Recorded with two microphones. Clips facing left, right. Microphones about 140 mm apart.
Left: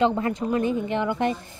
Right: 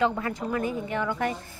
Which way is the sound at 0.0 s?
20° left (ahead or behind).